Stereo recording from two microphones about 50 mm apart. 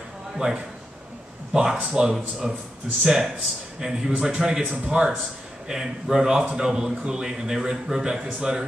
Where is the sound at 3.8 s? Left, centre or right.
Centre; by 4.9 s right.